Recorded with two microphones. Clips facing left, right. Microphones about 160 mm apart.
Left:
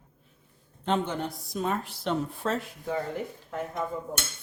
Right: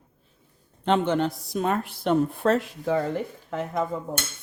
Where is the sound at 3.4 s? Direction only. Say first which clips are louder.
Right 4 dB; 90° right.